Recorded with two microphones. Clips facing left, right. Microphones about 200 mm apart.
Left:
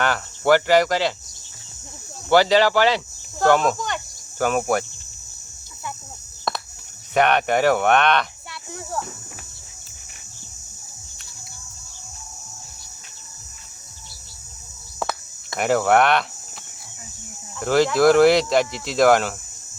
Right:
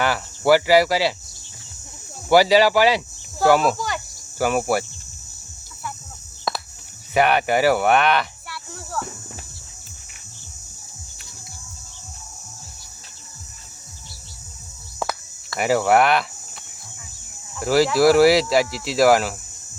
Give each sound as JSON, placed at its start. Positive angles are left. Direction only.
{"t": 0.0, "sound": "cricket", "side_deg": -10}
{"t": 2.3, "sound": "cricket", "side_deg": -10}
{"t": 3.4, "sound": "speech", "side_deg": -5}
{"t": 6.5, "sound": "a sound", "side_deg": 0}
{"t": 7.1, "sound": "speech", "side_deg": -5}
{"t": 8.4, "sound": "a sound", "side_deg": 15}
{"t": 15.0, "sound": "cricket", "side_deg": 0}
{"t": 15.5, "sound": "speech", "side_deg": -5}
{"t": 17.6, "sound": "speech", "side_deg": -5}